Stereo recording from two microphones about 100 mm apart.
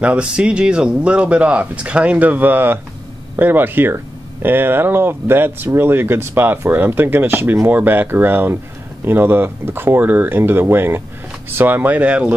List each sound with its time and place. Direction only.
0.0 s speech: 10° right (ahead or behind)